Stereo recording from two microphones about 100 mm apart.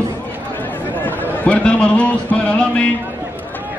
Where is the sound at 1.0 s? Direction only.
15° left (ahead or behind).